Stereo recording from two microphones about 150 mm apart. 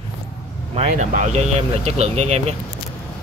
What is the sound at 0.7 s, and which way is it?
A man's voice, 50° right (ahead or behind).